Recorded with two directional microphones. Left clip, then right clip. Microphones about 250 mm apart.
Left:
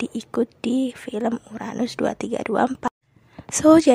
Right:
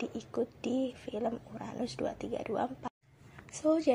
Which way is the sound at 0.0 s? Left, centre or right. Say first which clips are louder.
Left 10 dB; left.